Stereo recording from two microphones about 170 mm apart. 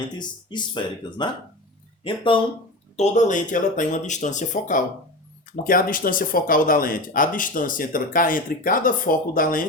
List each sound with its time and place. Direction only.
0.2 s speech: 25° left (ahead or behind)
2.9 s speech: 40° left (ahead or behind)